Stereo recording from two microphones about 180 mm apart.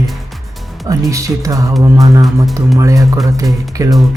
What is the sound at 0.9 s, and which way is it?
Speech, 20° right (ahead or behind).